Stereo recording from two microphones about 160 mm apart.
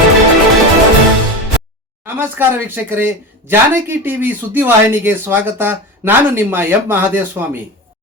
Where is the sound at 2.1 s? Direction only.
15° right (ahead or behind).